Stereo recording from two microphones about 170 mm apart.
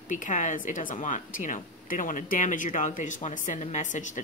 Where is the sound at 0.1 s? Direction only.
50° left (ahead or behind).